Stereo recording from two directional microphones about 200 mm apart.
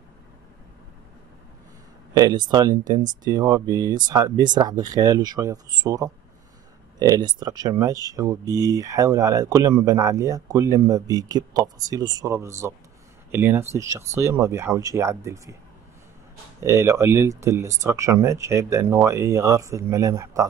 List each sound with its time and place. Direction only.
2.1 s speech: 20° right (ahead or behind)
16.6 s speech: 15° right (ahead or behind)